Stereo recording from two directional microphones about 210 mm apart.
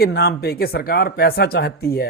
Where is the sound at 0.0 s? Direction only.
50° left (ahead or behind).